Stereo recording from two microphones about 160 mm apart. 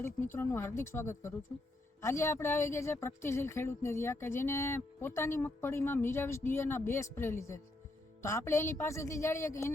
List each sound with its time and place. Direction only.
0.0 s speech: 15° left (ahead or behind)